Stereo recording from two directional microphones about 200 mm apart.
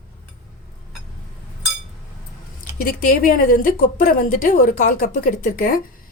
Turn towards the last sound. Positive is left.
turn(degrees=45)  # may be behind; listen again after turning